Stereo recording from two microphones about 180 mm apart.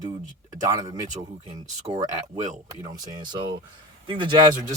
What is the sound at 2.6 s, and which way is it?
Speech, 20° right (ahead or behind).